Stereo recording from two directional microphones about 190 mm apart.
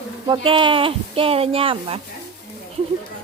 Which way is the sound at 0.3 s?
25° right (ahead or behind).